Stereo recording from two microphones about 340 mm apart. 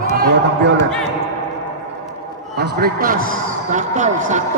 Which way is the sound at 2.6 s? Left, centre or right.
Right.